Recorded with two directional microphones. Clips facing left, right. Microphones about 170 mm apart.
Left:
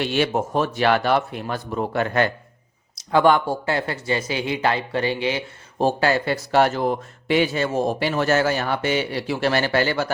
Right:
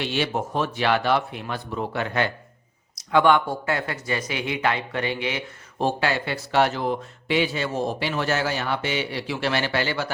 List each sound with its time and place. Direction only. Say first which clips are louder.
0.0 s a man's voice: left 4 dB; 50° left (ahead or behind)
2.9 s a man's voice: left 2 dB; 35° left (ahead or behind)